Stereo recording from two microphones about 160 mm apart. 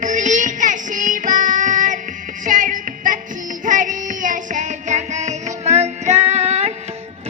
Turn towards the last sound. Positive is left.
turn(degrees=-40)  # may be behind; listen again after turning